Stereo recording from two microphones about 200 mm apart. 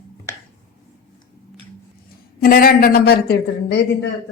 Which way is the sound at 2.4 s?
45° left (ahead or behind).